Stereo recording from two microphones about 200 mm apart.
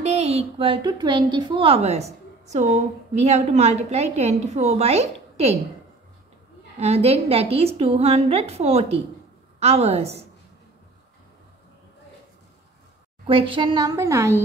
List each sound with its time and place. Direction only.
0.0 s a woman's voice: 35° right (ahead or behind)
6.8 s a woman's voice: 30° right (ahead or behind)
13.3 s a woman's voice: 25° right (ahead or behind)